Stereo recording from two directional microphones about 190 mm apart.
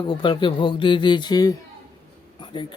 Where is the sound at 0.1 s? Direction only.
25° left (ahead or behind).